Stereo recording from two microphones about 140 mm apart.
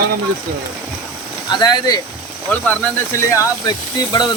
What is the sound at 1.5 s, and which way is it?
Speech, 30° left (ahead or behind).